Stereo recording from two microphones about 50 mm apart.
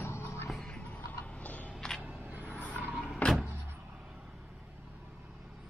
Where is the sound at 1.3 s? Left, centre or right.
Left.